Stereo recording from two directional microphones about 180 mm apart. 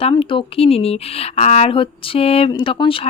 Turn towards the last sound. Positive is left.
turn(degrees=30)  # may be behind; listen again after turning